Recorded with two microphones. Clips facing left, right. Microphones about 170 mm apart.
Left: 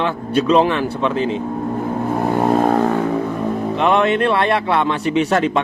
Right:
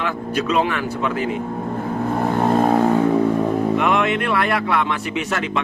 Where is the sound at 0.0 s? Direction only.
30° left (ahead or behind).